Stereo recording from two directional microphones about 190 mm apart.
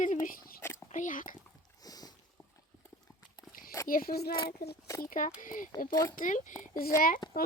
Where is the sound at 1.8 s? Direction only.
20° left (ahead or behind).